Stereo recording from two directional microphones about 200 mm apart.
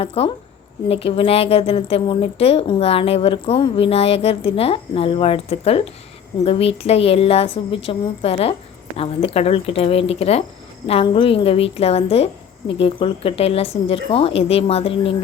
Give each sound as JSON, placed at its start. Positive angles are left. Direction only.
{"t": 0.0, "sound": "a woman's voice", "side_deg": 30}